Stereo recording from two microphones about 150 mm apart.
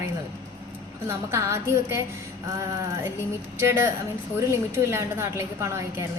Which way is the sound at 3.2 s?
15° right (ahead or behind).